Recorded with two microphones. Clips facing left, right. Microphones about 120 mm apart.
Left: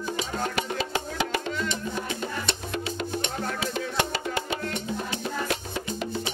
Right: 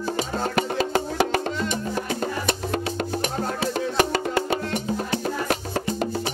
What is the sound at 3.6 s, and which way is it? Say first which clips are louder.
Music: right 7 dB; 45° right (ahead or behind).